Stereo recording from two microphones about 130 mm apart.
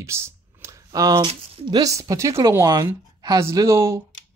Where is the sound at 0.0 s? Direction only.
20° right (ahead or behind).